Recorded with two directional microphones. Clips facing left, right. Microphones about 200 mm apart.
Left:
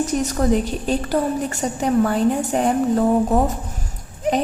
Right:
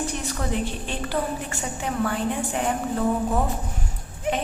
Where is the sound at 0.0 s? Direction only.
40° left (ahead or behind).